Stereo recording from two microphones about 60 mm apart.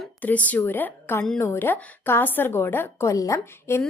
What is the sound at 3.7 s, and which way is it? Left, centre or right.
Speech, left.